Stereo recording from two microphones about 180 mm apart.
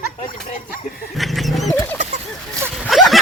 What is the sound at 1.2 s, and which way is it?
Wild animals, centre (ahead or behind).